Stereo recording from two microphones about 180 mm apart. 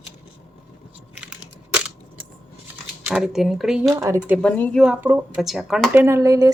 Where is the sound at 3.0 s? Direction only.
5° right (ahead or behind).